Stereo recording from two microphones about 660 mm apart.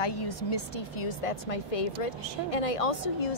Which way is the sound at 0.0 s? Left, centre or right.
Left.